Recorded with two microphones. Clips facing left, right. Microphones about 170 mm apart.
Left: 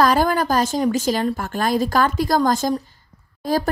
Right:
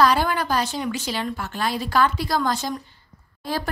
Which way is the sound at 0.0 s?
45° left (ahead or behind).